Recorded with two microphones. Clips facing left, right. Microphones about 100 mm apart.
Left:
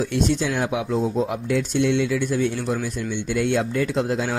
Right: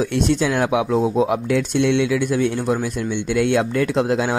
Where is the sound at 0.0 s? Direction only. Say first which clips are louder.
Right 3 dB; 80° right.